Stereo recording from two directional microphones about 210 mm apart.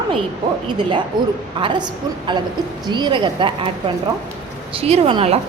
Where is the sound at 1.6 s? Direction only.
20° right (ahead or behind).